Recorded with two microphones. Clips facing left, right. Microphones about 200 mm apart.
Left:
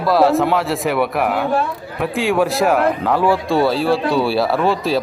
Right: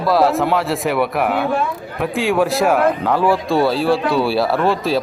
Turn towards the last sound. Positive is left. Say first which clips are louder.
# even
turn(degrees=0)  # may be behind; listen again after turning